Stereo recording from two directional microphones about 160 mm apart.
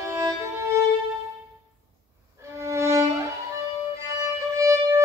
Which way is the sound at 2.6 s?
15° right (ahead or behind).